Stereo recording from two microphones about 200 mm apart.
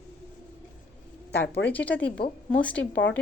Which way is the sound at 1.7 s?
10° left (ahead or behind).